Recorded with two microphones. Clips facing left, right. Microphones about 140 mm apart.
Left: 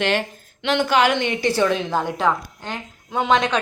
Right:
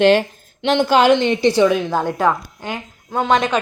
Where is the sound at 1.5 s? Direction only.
10° right (ahead or behind).